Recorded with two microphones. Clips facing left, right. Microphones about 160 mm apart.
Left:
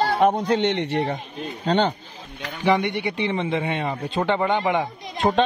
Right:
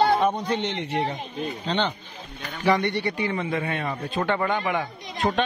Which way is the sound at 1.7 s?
40° left (ahead or behind).